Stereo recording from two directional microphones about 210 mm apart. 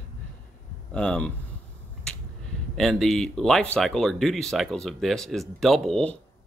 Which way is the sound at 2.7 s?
Centre (ahead or behind).